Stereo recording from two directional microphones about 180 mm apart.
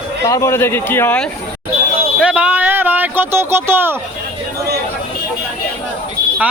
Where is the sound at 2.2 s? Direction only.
5° right (ahead or behind).